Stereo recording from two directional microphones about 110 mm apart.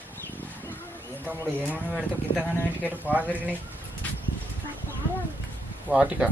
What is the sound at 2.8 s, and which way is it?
Speech, 15° left (ahead or behind).